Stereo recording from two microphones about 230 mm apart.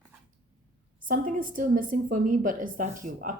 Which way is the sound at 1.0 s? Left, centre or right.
Right.